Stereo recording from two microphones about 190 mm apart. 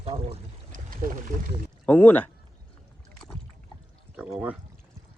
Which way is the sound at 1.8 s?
5° left (ahead or behind).